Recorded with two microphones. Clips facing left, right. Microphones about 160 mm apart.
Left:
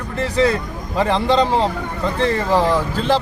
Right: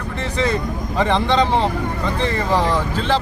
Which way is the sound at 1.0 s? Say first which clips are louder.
Left 1 dB; 10° left (ahead or behind).